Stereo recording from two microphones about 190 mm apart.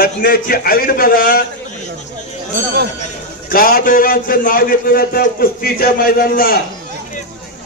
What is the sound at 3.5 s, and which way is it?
A man's voice, 50° left (ahead or behind).